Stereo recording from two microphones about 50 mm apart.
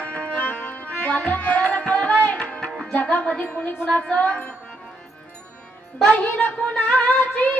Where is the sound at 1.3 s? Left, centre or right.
Left.